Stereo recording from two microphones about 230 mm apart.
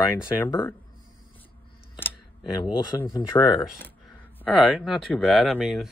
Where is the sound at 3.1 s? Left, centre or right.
Left.